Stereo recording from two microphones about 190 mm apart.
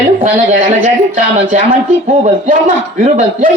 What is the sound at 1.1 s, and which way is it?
A man's voice, 45° right (ahead or behind).